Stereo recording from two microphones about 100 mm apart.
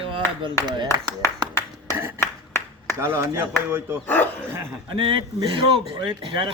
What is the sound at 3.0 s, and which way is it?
Speech, 25° right (ahead or behind).